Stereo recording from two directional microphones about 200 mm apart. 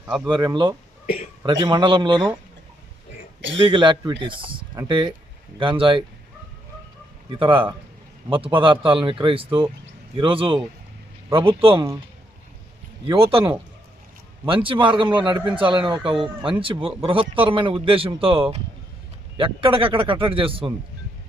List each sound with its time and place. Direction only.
0.3 s speech: 20° right (ahead or behind)
1.0 s a man's voice: 30° left (ahead or behind)
1.6 s speech: 20° right (ahead or behind)
3.7 s speech: 25° right (ahead or behind)
7.3 s speech: 25° right (ahead or behind)
13.1 s speech: 25° right (ahead or behind)
14.4 s speech: 25° right (ahead or behind)